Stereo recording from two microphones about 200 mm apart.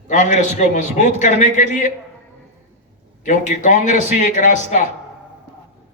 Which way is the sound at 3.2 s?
40° left (ahead or behind).